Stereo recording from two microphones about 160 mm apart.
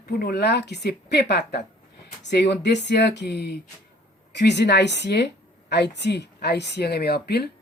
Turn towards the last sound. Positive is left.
turn(degrees=85)